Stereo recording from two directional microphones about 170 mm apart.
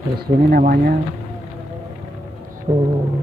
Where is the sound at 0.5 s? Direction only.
60° right (ahead or behind).